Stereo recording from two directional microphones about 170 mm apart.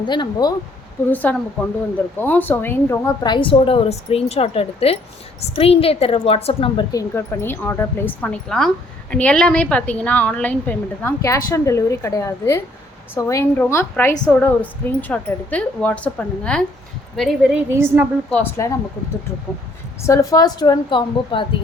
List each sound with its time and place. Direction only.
0.0 s speech: 25° left (ahead or behind)
1.1 s a woman's voice: 10° left (ahead or behind)
3.2 s a woman's voice: 30° left (ahead or behind)
6.9 s a woman's voice: 15° left (ahead or behind); by 17.6 s centre (ahead or behind)
17.7 s a woman's voice: 15° right (ahead or behind)
18.3 s a woman's voice: 10° left (ahead or behind)
20.0 s speech: 15° left (ahead or behind)